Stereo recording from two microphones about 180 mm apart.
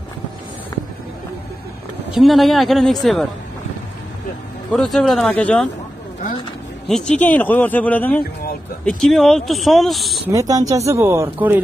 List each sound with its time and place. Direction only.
2.1 s speech: centre (ahead or behind)
4.7 s speech: centre (ahead or behind)
6.9 s speech: 5° left (ahead or behind)
10.3 s speech: 20° right (ahead or behind)